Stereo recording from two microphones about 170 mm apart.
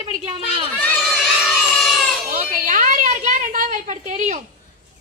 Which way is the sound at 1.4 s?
Centre (ahead or behind).